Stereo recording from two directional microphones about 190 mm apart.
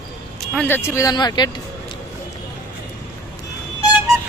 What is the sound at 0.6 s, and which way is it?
Speech, 10° left (ahead or behind).